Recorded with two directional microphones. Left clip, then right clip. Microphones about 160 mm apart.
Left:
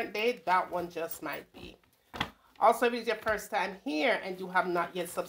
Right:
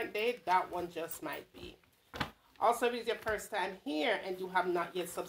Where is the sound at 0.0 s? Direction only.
40° left (ahead or behind).